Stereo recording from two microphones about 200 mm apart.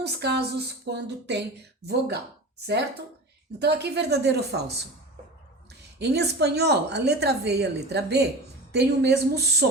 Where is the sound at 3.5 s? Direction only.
55° right (ahead or behind).